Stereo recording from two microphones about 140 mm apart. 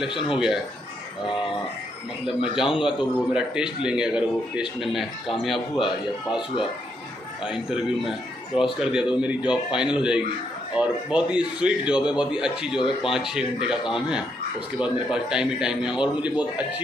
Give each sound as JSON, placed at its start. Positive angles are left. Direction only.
{"t": 0.1, "sound": "speech", "side_deg": 40}
{"t": 2.5, "sound": "speech", "side_deg": -5}
{"t": 7.4, "sound": "a man's voice", "side_deg": -5}